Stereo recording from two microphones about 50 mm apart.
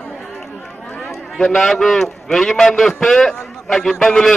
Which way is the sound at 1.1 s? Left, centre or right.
Centre.